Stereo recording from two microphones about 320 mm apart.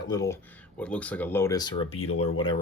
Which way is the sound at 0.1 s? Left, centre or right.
Centre.